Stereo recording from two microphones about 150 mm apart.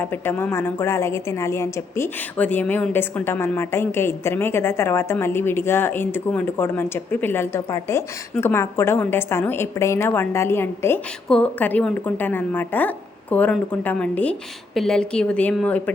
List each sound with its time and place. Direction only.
0.0 s a woman's voice: 15° left (ahead or behind)